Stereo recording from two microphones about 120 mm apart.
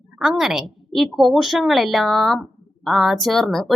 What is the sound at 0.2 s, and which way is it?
A woman's voice, 5° right (ahead or behind).